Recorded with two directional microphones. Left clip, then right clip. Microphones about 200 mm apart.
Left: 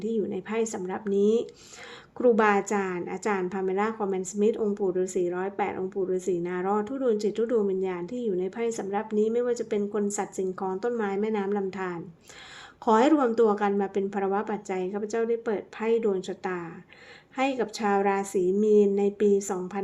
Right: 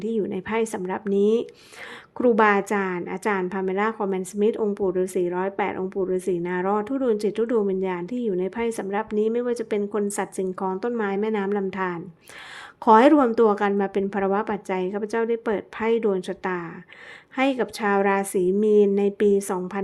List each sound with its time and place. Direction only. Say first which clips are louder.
0.0 s a woman's voice: right 3 dB; 25° right (ahead or behind)